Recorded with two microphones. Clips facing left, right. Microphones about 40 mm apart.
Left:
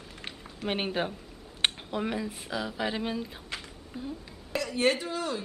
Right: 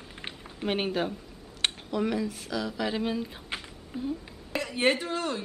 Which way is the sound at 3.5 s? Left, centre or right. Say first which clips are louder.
Right 2 dB; right.